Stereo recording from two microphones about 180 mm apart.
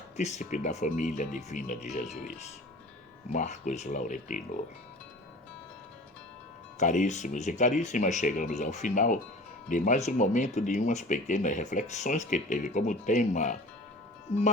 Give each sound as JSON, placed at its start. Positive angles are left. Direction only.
{"t": 0.2, "sound": "speech", "side_deg": 40}
{"t": 3.3, "sound": "speech", "side_deg": 40}
{"t": 6.7, "sound": "speech", "side_deg": 45}